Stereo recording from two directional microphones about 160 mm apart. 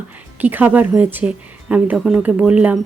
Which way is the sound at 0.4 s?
10° right (ahead or behind).